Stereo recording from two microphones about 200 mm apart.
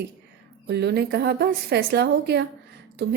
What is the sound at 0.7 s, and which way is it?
A woman's voice, 55° right (ahead or behind).